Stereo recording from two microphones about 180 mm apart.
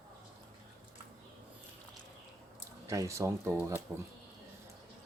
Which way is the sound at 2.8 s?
15° right (ahead or behind).